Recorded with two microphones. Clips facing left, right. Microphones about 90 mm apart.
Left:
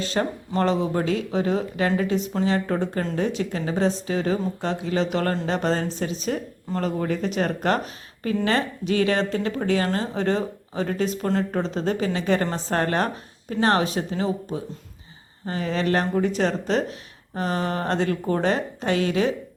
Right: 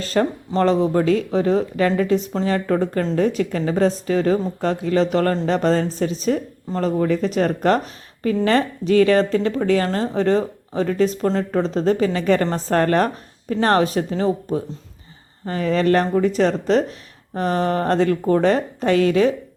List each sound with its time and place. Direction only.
0.0 s a woman's voice: 45° right (ahead or behind)